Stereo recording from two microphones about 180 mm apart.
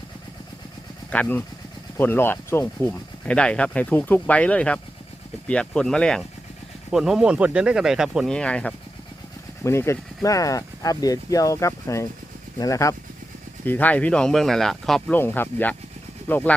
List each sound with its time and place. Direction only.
1.1 s speech: 10° left (ahead or behind)